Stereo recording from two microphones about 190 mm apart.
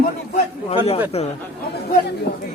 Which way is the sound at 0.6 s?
30° left (ahead or behind).